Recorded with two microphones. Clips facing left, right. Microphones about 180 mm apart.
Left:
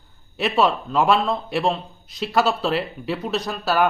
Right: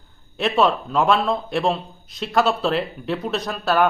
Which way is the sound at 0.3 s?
Centre (ahead or behind).